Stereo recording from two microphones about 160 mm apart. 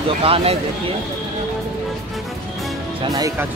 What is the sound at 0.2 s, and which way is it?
Speech, 35° right (ahead or behind).